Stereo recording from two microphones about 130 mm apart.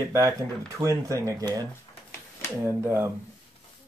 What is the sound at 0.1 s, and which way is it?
Speech, 25° right (ahead or behind).